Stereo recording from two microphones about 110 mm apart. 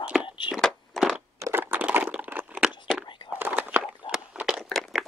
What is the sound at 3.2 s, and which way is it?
Biting, 20° right (ahead or behind).